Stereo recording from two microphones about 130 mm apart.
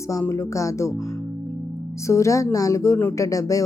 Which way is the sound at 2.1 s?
25° left (ahead or behind).